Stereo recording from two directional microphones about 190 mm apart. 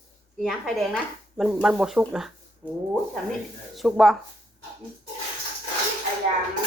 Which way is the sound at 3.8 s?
Centre (ahead or behind).